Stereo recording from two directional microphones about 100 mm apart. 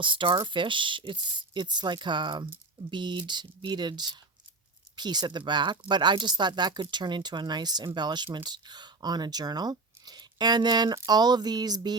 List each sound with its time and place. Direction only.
0.0 s speech: 55° right (ahead or behind)